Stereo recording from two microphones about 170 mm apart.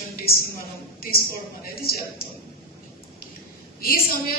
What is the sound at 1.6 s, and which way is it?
Speech, 65° left (ahead or behind).